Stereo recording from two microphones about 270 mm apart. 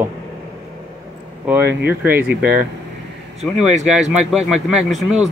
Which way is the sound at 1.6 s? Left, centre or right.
Right.